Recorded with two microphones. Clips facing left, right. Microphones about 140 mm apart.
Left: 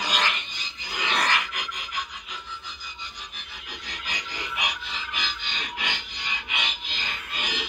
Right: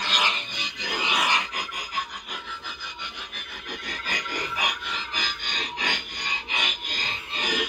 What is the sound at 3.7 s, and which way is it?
Music, 50° right (ahead or behind).